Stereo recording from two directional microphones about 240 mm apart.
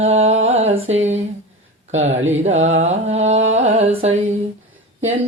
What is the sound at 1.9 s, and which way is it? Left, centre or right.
Speech, right.